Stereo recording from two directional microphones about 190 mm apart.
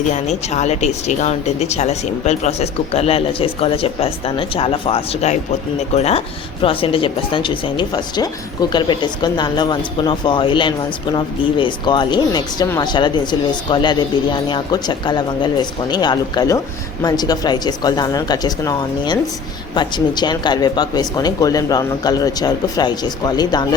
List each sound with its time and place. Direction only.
0.1 s speech: 40° left (ahead or behind); by 23.6 s 20° left (ahead or behind)